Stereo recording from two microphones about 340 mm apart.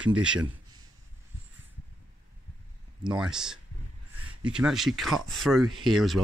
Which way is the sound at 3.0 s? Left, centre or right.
Centre.